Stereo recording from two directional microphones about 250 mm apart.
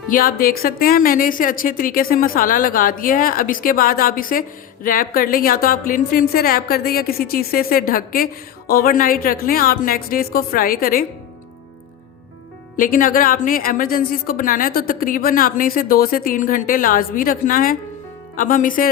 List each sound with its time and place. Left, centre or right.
0.1 s a woman's voice: left
12.7 s a woman's voice: left